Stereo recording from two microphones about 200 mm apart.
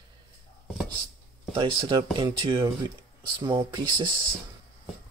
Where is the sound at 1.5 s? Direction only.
25° right (ahead or behind).